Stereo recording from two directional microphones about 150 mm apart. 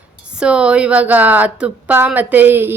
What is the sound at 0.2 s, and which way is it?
A woman's voice, 5° right (ahead or behind).